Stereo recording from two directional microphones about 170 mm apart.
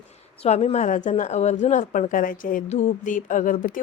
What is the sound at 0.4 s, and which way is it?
A woman's voice, 40° left (ahead or behind).